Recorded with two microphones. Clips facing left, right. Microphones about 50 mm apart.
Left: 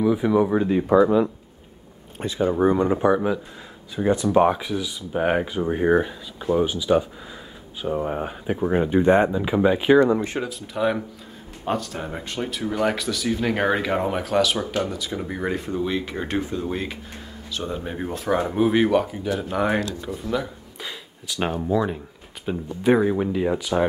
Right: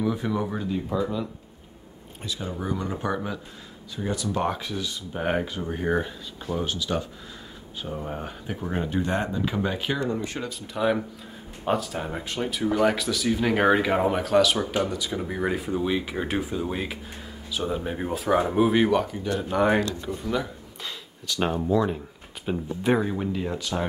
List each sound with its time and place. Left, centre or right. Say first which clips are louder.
0.0 s speech: left 7 dB; centre
0.8 s speech: left 13 dB; left
2.2 s speech: left 11 dB; left
3.0 s speech: left 9 dB; centre
3.9 s speech: left 9 dB; left
4.5 s speech: left 6 dB; centre
7.8 s speech: left 8 dB; left
10.4 s speech: left 2 dB; centre
23.0 s speech: left 6 dB; centre